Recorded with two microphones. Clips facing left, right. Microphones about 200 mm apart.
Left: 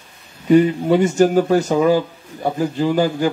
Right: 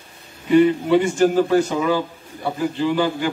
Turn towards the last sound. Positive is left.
turn(degrees=40)  # may be behind; listen again after turning